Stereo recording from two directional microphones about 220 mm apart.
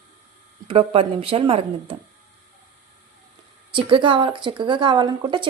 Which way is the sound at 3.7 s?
25° right (ahead or behind).